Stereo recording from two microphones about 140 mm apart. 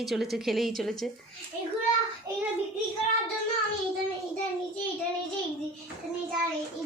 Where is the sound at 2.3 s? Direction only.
25° right (ahead or behind).